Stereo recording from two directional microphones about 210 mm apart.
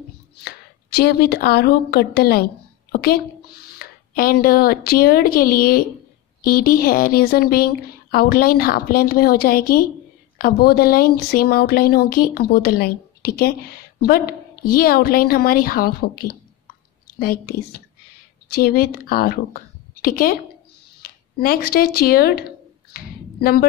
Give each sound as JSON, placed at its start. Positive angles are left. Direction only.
{"t": 0.4, "sound": "a woman's voice", "side_deg": 50}